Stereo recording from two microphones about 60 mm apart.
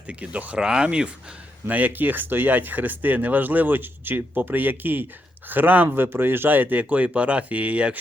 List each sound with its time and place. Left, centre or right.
0.1 s speech: right
0.6 s speech: centre
1.6 s speech: right